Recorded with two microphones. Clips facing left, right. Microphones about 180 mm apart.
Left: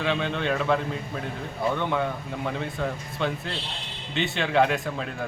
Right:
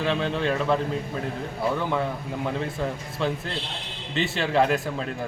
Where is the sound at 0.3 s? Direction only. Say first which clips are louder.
Right 1 dB; centre (ahead or behind).